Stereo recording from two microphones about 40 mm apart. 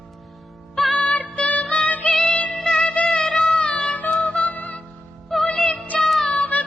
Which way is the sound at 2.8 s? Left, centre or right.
Left.